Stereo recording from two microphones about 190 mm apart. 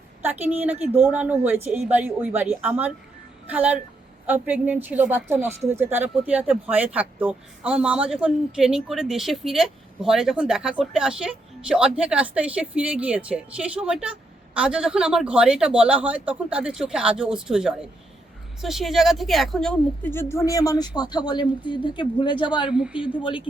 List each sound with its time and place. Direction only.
0.2 s a woman's voice: 10° right (ahead or behind); by 22.7 s 25° left (ahead or behind)
22.7 s a woman's voice: 5° right (ahead or behind)